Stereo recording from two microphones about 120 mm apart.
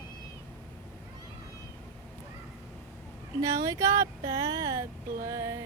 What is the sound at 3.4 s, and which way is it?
Speech, 30° right (ahead or behind).